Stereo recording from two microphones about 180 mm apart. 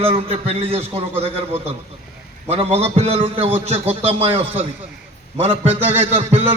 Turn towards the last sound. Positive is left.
turn(degrees=-35)  # may be behind; listen again after turning